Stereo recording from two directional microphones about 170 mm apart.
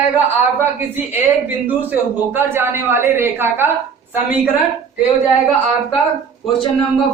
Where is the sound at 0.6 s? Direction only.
10° right (ahead or behind).